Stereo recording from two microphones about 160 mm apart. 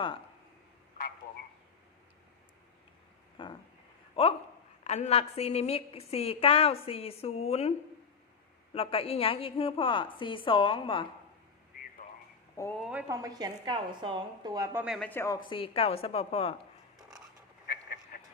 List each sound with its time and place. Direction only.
3.4 s a sound: 30° left (ahead or behind)
4.1 s a woman's voice: 35° left (ahead or behind)
8.7 s a woman's voice: 35° left (ahead or behind)
12.8 s a woman's voice: 10° right (ahead or behind)
13.1 s a woman's voice: 20° right (ahead or behind)
14.7 s a woman's voice: 10° right (ahead or behind)
14.9 s speech: 10° left (ahead or behind)
15.4 s a woman's voice: 30° left (ahead or behind)
17.7 s a sound: 75° left (ahead or behind)